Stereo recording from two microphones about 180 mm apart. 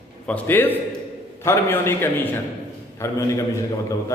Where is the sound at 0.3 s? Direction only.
10° left (ahead or behind).